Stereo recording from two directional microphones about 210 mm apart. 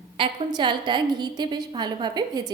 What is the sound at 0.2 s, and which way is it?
A woman's voice, 20° right (ahead or behind).